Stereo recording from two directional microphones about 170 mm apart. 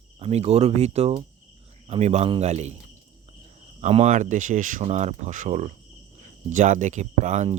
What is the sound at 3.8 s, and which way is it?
Speech, 40° right (ahead or behind).